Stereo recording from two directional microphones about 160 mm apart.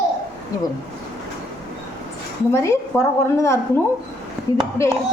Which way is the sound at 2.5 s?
15° left (ahead or behind).